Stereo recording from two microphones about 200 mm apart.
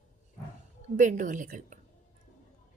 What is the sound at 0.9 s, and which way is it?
Speech, 40° right (ahead or behind).